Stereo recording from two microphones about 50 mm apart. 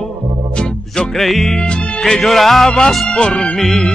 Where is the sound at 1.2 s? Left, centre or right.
Centre.